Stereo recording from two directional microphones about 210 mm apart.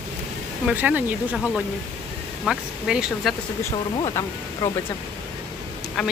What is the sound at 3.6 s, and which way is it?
Speech, 15° left (ahead or behind).